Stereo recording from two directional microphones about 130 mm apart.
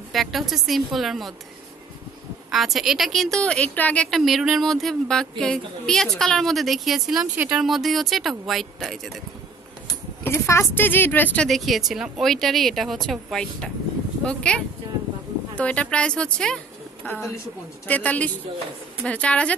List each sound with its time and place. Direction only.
0.1 s a woman's voice: centre (ahead or behind)
2.5 s a woman's voice: centre (ahead or behind)
10.2 s speech: 20° left (ahead or behind)
11.4 s a woman's voice: centre (ahead or behind)